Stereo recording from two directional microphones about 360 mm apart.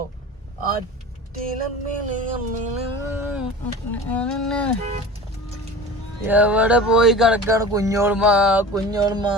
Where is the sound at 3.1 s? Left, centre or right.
Centre.